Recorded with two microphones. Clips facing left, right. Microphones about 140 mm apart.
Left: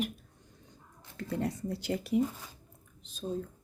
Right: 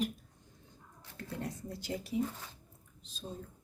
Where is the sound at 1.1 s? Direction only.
75° left (ahead or behind).